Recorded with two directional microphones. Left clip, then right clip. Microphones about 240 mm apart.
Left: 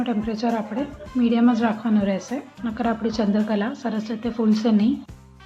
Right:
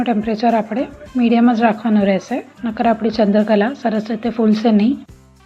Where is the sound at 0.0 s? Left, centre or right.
Right.